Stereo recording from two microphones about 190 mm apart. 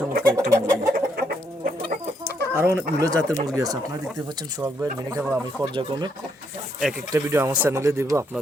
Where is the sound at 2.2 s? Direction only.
15° right (ahead or behind).